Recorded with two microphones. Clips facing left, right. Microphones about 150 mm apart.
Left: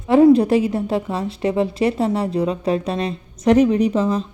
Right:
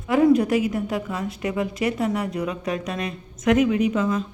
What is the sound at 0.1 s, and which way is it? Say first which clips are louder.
A woman's voice: left 5 dB; 30° left (ahead or behind).